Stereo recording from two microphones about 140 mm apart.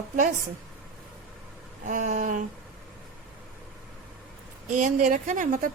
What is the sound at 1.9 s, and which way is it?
Speech, 65° right (ahead or behind).